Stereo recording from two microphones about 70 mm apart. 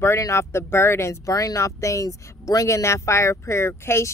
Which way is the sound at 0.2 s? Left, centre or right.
Left.